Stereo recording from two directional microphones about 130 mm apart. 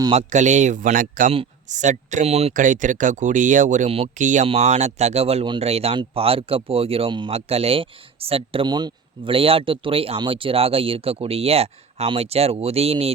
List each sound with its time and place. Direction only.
0.1 s speech: 60° right (ahead or behind); by 1.3 s 90° right
1.7 s speech: 70° right (ahead or behind)
2.5 s speech: 80° right
4.4 s speech: 55° right (ahead or behind)
8.6 s speech: 35° right (ahead or behind); by 13.1 s 50° right (ahead or behind)